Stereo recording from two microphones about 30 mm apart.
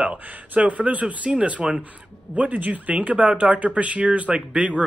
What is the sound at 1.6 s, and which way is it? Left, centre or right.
Speech, right.